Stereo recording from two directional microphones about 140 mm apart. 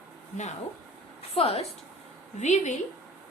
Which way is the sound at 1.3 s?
45° left (ahead or behind).